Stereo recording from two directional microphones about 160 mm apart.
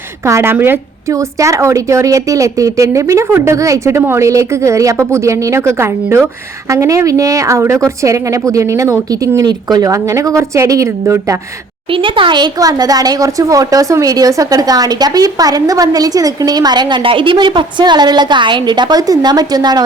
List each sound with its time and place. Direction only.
0.3 s speech: 15° right (ahead or behind)
11.9 s speech: 30° right (ahead or behind)